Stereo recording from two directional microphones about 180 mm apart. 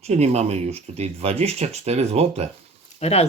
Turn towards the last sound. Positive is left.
turn(degrees=35)  # may be behind; listen again after turning